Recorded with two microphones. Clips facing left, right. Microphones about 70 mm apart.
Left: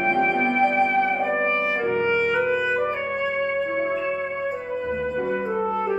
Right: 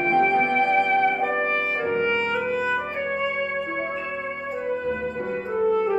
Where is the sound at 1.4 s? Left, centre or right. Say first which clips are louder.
Left 1 dB; left.